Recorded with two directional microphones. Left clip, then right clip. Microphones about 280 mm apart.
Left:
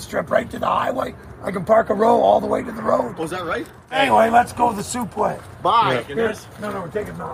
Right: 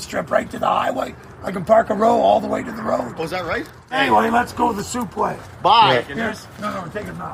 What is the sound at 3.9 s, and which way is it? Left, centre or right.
Speech, left.